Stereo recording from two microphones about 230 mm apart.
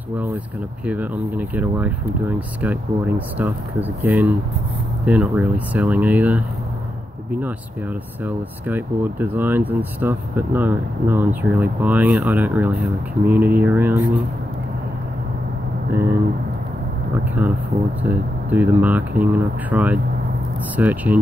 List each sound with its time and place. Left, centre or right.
0.8 s speech: centre
8.2 s speech: centre
17.7 s speech: right
18.0 s speech: centre